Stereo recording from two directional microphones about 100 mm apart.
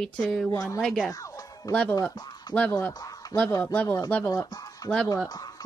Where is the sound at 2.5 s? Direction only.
45° left (ahead or behind).